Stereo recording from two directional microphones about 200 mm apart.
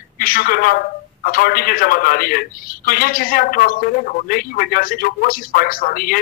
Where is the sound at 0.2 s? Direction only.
45° left (ahead or behind).